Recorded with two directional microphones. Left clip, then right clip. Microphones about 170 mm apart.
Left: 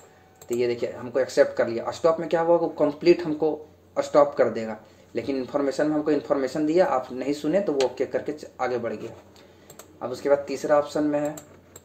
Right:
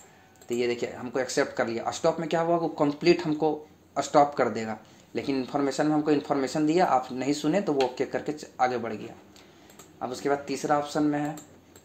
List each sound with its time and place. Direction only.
0.5 s speech: 25° right (ahead or behind)
9.9 s speech: 25° right (ahead or behind)